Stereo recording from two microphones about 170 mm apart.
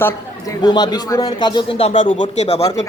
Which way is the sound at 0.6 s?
25° left (ahead or behind).